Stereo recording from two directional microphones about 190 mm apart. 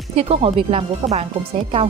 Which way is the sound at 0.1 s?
35° right (ahead or behind).